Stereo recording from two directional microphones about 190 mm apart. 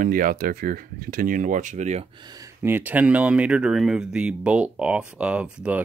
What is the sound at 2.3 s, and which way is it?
Speech, 15° right (ahead or behind).